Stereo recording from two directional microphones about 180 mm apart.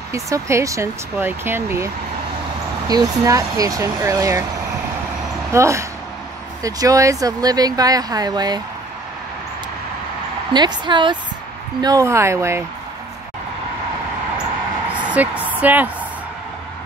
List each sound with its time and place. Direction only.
0.1 s speech: 15° right (ahead or behind)
2.9 s speech: 20° right (ahead or behind)
5.5 s speech: 15° right (ahead or behind)
10.5 s speech: 25° right (ahead or behind)
15.4 s a woman's voice: 10° right (ahead or behind)